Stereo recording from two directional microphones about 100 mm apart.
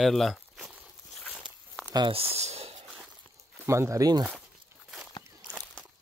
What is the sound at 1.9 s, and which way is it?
Speech, 50° right (ahead or behind).